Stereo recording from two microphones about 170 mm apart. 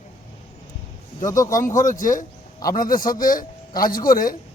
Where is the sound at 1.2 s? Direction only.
20° left (ahead or behind).